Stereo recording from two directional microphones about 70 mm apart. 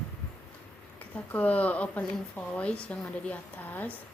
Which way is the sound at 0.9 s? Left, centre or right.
Left.